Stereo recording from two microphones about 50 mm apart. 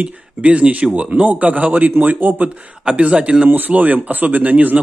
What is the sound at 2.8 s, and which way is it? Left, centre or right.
Speech, right.